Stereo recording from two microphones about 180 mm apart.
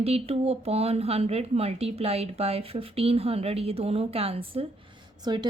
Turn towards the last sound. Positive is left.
turn(degrees=-25)  # may be behind; listen again after turning